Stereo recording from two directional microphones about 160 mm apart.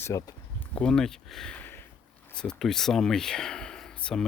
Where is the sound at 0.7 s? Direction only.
5° left (ahead or behind).